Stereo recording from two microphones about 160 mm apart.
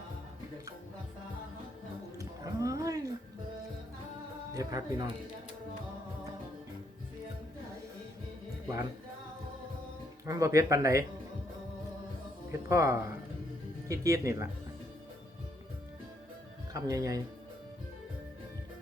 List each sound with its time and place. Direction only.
2.1 s a sound: 20° right (ahead or behind)
4.5 s speech: 25° right (ahead or behind)
10.2 s speech: 20° right (ahead or behind)
12.5 s speech: 20° right (ahead or behind)
16.7 s speech: 20° right (ahead or behind)